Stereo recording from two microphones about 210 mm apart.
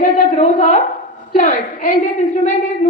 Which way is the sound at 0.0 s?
35° left (ahead or behind).